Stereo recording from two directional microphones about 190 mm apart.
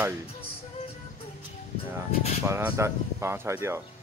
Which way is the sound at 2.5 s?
15° right (ahead or behind).